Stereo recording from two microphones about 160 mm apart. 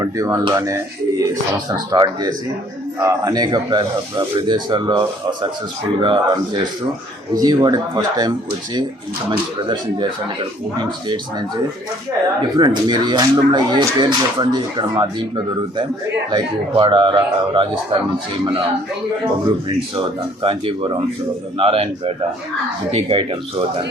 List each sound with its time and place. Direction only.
0.0 s speech: 20° right (ahead or behind)
9.3 s speech: 30° right (ahead or behind)
12.5 s speech: 25° right (ahead or behind)
16.3 s speech: 30° right (ahead or behind)
20.0 s speech: 35° right (ahead or behind)